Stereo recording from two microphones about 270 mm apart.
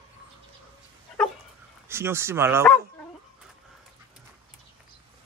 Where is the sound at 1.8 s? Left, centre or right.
Centre.